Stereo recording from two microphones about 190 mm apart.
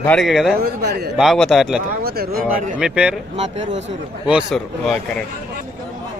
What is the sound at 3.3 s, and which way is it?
Speech, 35° right (ahead or behind).